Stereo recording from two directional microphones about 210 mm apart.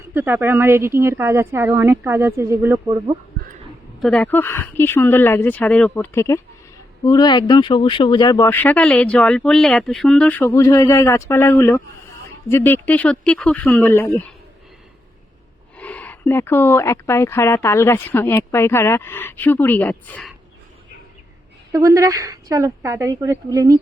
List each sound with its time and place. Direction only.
0.1 s speech: 10° right (ahead or behind)
4.0 s speech: 5° left (ahead or behind)
15.8 s speech: 5° left (ahead or behind)
21.7 s speech: 15° right (ahead or behind)